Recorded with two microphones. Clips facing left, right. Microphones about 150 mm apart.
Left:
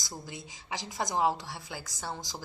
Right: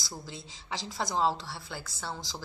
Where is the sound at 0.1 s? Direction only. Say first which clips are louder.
Left 1 dB; 15° left (ahead or behind).